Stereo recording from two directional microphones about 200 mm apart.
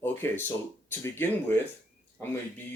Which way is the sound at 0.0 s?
10° left (ahead or behind).